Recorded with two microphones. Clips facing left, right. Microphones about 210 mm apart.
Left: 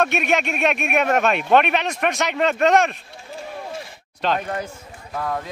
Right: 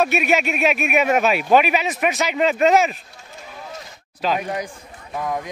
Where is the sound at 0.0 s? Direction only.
5° right (ahead or behind).